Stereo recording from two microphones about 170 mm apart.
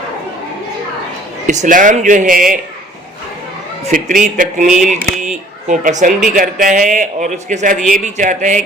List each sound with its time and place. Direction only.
1.5 s a man's voice: 45° right (ahead or behind)
3.9 s a man's voice: 50° right (ahead or behind)